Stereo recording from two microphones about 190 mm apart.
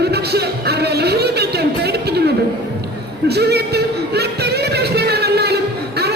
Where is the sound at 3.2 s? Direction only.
60° right (ahead or behind).